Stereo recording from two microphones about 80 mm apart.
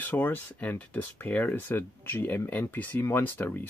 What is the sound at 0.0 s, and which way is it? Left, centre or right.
Speech, left.